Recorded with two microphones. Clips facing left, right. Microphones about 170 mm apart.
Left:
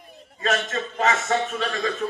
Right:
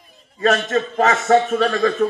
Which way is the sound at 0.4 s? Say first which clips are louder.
Right 7 dB; 40° right (ahead or behind).